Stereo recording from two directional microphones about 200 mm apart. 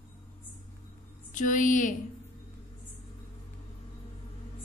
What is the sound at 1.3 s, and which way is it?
Speech, 40° left (ahead or behind).